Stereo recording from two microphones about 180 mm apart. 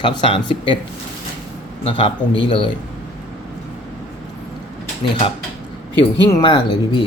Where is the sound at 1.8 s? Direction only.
30° left (ahead or behind).